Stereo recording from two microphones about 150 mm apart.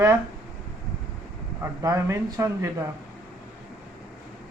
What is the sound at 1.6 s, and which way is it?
A man's voice, 20° right (ahead or behind).